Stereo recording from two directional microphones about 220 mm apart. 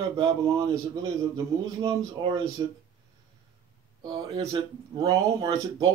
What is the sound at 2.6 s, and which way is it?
Speech, 20° right (ahead or behind).